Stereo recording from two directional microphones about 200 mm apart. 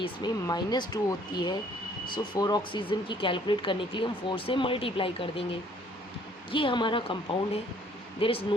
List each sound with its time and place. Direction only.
0.0 s speech: 20° left (ahead or behind)
6.5 s speech: 25° left (ahead or behind)